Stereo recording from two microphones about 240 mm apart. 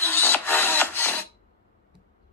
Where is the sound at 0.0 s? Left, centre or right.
Centre.